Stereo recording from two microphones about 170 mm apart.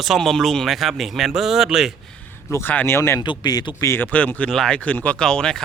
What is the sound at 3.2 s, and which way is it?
A man's voice, 25° left (ahead or behind).